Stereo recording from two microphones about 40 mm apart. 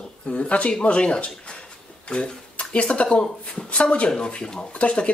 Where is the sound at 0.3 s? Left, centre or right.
Left.